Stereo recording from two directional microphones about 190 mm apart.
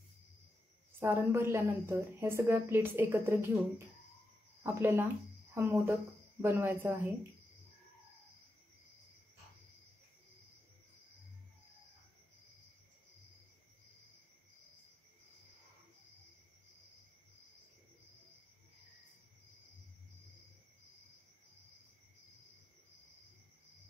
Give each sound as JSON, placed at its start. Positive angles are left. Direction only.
{"t": 0.9, "sound": "a woman's voice", "side_deg": -15}